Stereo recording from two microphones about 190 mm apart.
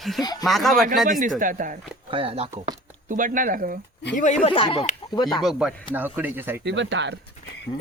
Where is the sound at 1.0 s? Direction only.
45° right (ahead or behind).